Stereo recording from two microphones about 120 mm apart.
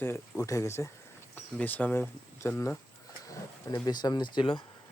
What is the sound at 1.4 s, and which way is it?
Speech, 15° left (ahead or behind).